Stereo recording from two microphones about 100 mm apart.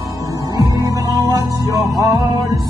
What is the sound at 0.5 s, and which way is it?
Music, 35° right (ahead or behind).